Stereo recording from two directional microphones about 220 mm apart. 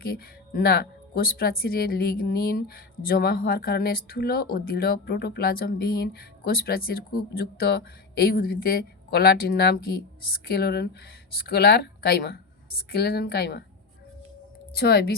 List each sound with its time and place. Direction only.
0.0 s speech: 45° left (ahead or behind)
14.8 s speech: 45° left (ahead or behind)